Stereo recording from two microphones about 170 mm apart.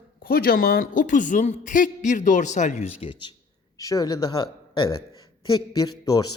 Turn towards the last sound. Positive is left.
turn(degrees=20)  # may be behind; listen again after turning